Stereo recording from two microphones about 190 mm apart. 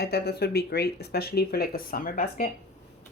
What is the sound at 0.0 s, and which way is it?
Speech, 55° left (ahead or behind).